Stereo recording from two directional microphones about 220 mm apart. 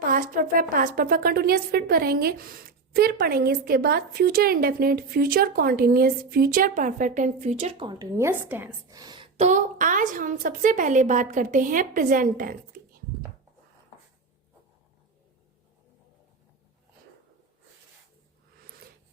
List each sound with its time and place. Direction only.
0.0 s a woman's voice: 40° right (ahead or behind)